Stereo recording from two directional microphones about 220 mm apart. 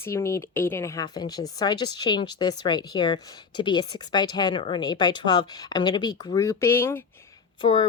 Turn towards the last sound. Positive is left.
turn(degrees=25)  # may be behind; listen again after turning